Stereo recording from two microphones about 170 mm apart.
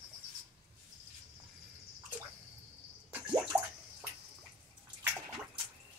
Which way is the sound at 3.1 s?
15° right (ahead or behind).